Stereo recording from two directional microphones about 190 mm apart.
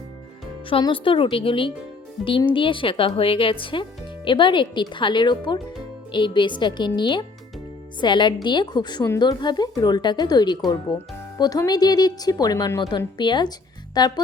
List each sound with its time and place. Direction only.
0.7 s a woman's voice: 25° left (ahead or behind)